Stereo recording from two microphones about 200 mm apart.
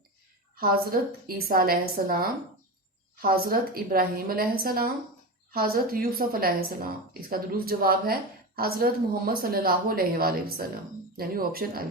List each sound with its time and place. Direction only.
0.5 s a woman's voice: 50° right (ahead or behind)